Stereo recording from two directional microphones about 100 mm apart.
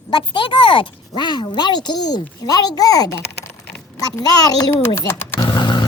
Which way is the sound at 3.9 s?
40° left (ahead or behind).